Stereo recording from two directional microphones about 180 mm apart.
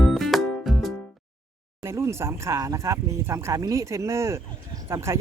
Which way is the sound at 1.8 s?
15° right (ahead or behind).